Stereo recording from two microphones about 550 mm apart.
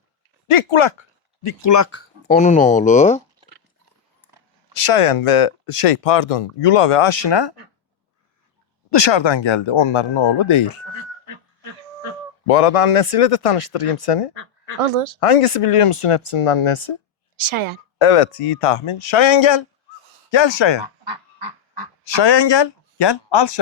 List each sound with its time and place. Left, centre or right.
0.4 s speech: left; by 3.2 s centre
4.7 s speech: left
8.9 s speech: left
12.5 s speech: left
14.8 s speech: right
15.2 s speech: left
17.3 s a woman's voice: right
18.0 s speech: left
20.8 s goose: right
22.1 s speech: left